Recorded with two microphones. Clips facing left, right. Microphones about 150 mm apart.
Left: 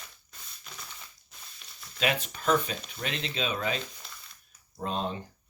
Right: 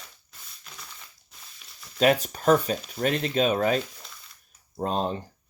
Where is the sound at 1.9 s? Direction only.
40° right (ahead or behind).